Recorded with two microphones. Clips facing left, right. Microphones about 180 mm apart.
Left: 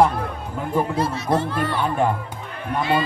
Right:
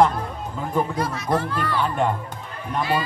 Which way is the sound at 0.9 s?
25° left (ahead or behind).